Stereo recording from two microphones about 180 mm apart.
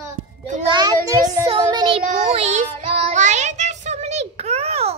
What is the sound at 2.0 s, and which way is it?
Child singing, 40° right (ahead or behind).